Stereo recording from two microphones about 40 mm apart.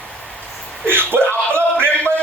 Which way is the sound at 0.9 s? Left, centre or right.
Right.